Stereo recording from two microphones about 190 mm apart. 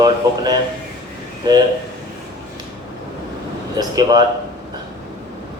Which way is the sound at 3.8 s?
20° right (ahead or behind).